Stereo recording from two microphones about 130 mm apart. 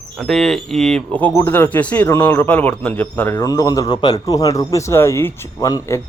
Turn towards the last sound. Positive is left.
turn(degrees=20)  # may be behind; listen again after turning